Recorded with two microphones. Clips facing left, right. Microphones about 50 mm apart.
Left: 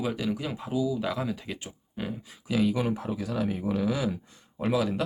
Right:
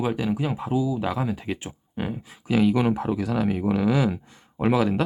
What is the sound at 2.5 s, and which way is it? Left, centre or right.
Speech, right.